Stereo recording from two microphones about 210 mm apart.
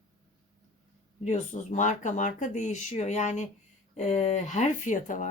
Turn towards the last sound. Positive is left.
turn(degrees=35)  # may be behind; listen again after turning